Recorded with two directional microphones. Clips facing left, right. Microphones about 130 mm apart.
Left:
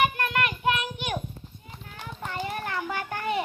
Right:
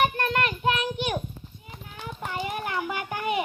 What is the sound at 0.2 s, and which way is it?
Child singing, 30° right (ahead or behind).